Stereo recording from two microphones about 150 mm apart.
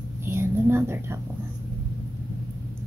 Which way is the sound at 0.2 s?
15° right (ahead or behind).